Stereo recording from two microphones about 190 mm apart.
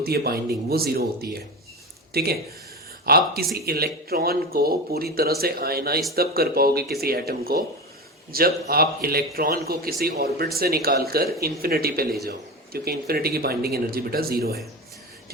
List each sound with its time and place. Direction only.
0.0 s a man's voice: 55° right (ahead or behind)